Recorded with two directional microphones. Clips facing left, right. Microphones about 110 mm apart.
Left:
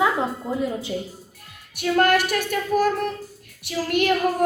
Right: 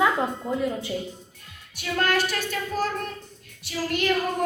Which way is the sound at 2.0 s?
55° left (ahead or behind).